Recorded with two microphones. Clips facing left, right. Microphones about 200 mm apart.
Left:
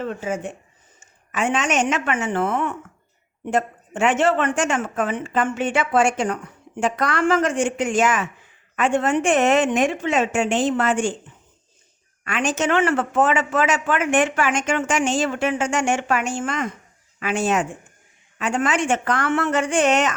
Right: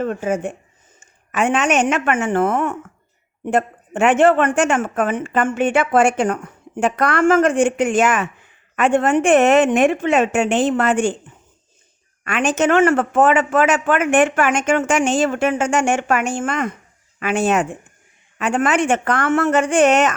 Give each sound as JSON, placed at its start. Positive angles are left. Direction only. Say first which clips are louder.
{"t": 0.0, "sound": "a woman's voice", "louder": "right 5 dB", "side_deg": -50}
{"t": 12.2, "sound": "a man's voice", "louder": "right 5 dB", "side_deg": -60}